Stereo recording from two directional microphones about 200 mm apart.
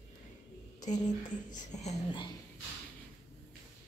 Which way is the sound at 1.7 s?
35° left (ahead or behind).